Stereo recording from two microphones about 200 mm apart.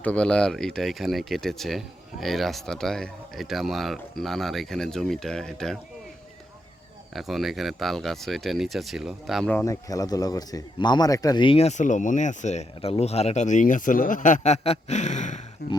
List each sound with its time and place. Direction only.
0.0 s speech: 5° left (ahead or behind)
7.1 s speech: centre (ahead or behind)
9.6 s speech: 15° left (ahead or behind); by 15.4 s 35° left (ahead or behind)
15.6 s speech: 50° left (ahead or behind)